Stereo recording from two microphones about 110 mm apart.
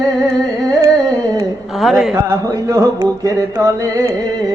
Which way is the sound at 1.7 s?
Centre (ahead or behind).